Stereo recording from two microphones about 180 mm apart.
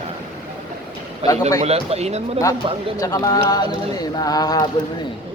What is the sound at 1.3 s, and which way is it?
Speech, 20° left (ahead or behind).